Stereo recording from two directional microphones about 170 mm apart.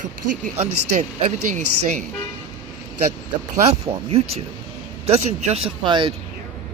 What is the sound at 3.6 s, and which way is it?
Speech, 35° right (ahead or behind).